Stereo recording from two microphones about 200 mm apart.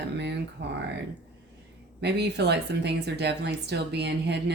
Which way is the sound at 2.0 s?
55° right (ahead or behind).